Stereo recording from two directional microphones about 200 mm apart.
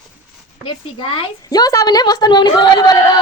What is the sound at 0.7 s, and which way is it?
A woman's voice, 25° left (ahead or behind).